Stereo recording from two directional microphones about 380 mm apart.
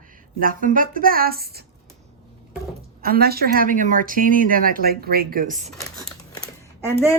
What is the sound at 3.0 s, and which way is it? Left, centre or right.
A woman's voice, right.